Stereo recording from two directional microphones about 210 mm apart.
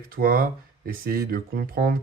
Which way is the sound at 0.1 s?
45° right (ahead or behind).